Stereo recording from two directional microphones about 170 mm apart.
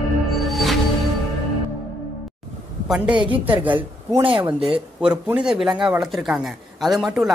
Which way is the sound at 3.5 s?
10° right (ahead or behind).